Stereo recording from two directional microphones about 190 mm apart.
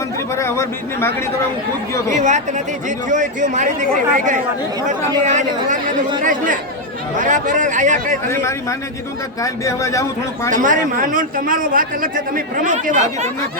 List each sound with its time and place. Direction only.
0.3 s a man's voice: 15° left (ahead or behind)
2.0 s speech: 40° right (ahead or behind)
5.2 s a man's voice: 40° right (ahead or behind)
8.3 s a man's voice: 15° left (ahead or behind)
10.5 s a man's voice: 45° right (ahead or behind)